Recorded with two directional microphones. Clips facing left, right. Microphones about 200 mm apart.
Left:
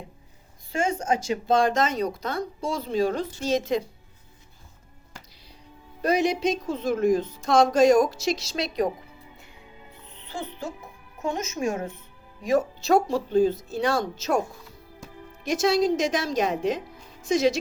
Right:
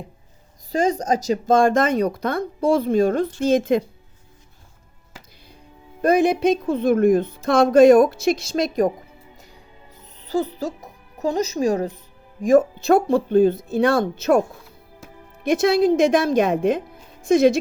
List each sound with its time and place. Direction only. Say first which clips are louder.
0.7 s speech: right 5 dB; 35° right (ahead or behind); by 3.8 s 55° right (ahead or behind)
6.0 s speech: right 6 dB; 50° right (ahead or behind)
10.0 s speech: right 12 dB; 40° right (ahead or behind); by 14.4 s 55° right (ahead or behind)
15.4 s speech: right 5 dB; 55° right (ahead or behind)